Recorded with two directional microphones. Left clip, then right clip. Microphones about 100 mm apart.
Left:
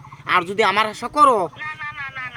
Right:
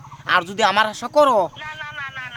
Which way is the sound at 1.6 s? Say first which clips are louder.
Left 1 dB; 10° right (ahead or behind).